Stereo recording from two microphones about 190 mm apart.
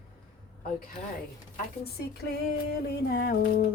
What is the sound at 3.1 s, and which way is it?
Speech, 50° left (ahead or behind).